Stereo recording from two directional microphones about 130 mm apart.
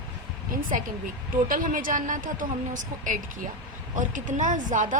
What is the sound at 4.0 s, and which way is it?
Speech, 80° right.